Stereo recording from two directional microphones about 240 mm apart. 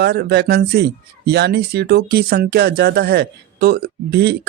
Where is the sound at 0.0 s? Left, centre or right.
Right.